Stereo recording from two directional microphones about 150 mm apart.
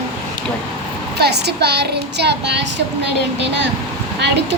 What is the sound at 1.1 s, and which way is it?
Speech, 90° right.